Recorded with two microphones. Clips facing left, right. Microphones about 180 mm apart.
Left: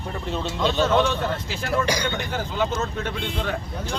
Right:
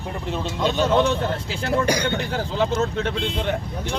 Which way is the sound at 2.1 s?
30° right (ahead or behind).